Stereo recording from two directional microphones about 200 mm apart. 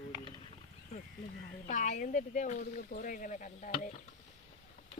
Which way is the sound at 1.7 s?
40° left (ahead or behind).